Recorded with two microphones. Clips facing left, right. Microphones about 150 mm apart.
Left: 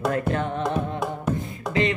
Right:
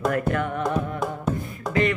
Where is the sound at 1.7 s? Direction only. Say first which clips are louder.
Right 1 dB; 25° left (ahead or behind).